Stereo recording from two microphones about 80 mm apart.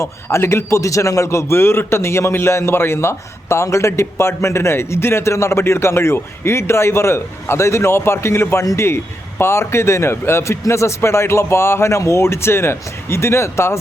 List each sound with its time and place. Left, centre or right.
0.0 s a man's voice: left